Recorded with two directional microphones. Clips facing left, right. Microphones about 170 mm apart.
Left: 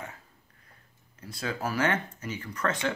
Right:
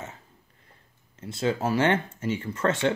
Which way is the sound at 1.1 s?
25° right (ahead or behind).